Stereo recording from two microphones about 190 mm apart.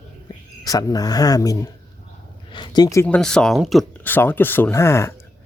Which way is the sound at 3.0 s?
5° left (ahead or behind).